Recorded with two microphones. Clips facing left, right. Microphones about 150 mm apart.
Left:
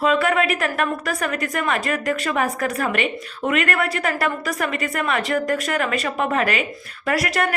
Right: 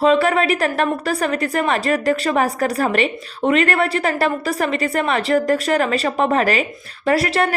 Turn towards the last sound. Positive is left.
turn(degrees=-30)  # may be behind; listen again after turning